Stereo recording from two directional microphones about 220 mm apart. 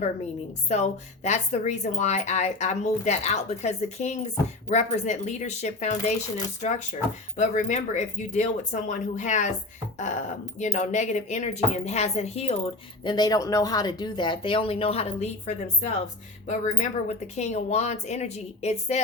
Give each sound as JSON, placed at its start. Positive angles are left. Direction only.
{"t": 0.7, "sound": "speech", "side_deg": 30}
{"t": 13.1, "sound": "speech", "side_deg": 20}